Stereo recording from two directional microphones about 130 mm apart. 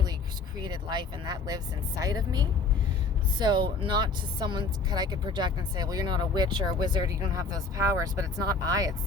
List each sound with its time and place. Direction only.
0.6 s speech: 35° right (ahead or behind)